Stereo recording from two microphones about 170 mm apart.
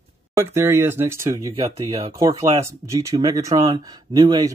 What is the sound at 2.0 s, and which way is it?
Speech, 20° right (ahead or behind).